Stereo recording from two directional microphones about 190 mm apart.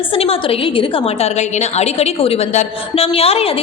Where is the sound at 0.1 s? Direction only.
30° left (ahead or behind).